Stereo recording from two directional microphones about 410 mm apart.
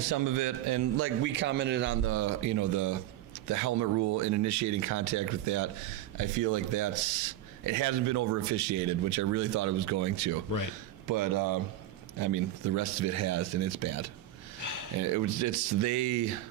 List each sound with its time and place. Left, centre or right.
0.1 s speech: right
0.9 s a man's voice: right
15.1 s speech: right